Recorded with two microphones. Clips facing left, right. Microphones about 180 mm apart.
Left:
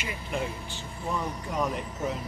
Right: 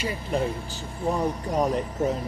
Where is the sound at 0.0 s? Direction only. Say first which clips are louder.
Right 6 dB; 35° right (ahead or behind).